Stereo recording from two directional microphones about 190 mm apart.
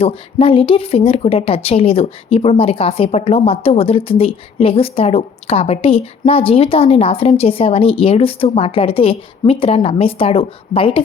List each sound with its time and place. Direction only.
0.0 s speech: 30° left (ahead or behind)